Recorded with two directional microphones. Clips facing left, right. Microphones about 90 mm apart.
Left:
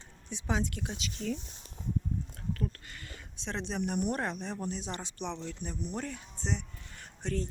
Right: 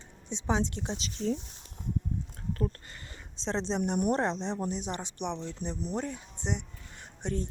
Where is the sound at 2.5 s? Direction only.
35° right (ahead or behind).